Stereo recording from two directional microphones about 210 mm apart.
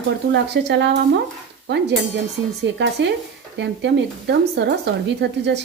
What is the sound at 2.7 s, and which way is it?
Speech, 55° right (ahead or behind).